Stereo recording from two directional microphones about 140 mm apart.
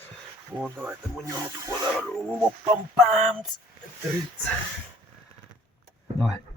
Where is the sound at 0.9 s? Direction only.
20° right (ahead or behind).